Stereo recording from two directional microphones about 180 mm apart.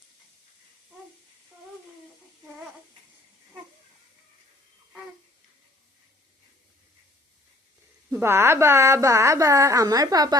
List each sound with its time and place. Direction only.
8.1 s a woman's voice: 15° right (ahead or behind)